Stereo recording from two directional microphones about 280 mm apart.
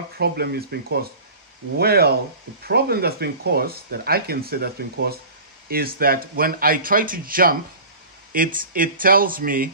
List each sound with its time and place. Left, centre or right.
0.2 s speech: right